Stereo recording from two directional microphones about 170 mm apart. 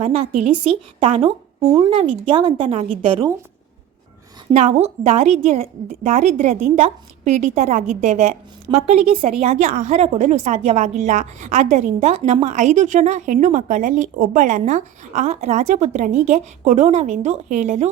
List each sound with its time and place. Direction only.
0.0 s a woman's voice: 40° right (ahead or behind)
4.5 s a woman's voice: 40° right (ahead or behind)